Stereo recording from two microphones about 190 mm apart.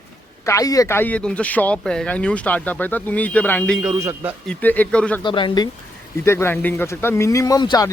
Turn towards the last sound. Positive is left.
turn(degrees=20)  # may be behind; listen again after turning